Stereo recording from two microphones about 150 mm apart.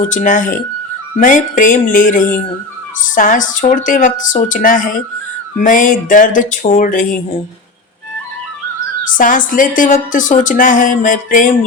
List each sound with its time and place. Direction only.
0.1 s a woman's voice: 60° left (ahead or behind)
9.1 s a woman's voice: 60° left (ahead or behind)